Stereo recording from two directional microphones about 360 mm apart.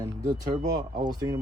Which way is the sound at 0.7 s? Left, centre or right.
Centre.